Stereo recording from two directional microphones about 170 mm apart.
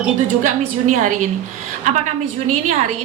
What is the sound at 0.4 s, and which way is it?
Speech, 50° right (ahead or behind).